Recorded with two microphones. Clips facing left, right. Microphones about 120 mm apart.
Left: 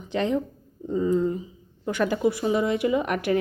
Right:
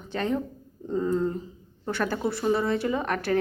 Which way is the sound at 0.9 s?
Centre (ahead or behind).